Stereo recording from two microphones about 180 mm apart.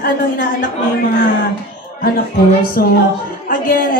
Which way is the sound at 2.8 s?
55° left (ahead or behind).